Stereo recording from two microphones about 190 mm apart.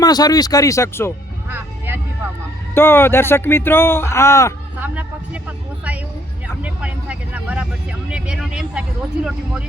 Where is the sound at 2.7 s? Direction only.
10° left (ahead or behind).